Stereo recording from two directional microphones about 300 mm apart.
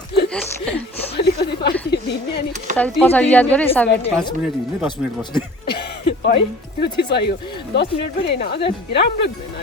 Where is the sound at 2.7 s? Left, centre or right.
Centre.